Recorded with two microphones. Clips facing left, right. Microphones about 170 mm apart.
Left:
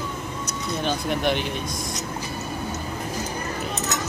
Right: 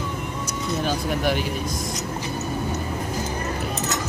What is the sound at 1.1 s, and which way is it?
Speech, 5° right (ahead or behind).